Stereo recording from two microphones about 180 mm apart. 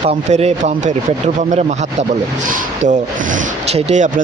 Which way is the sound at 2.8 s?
40° right (ahead or behind).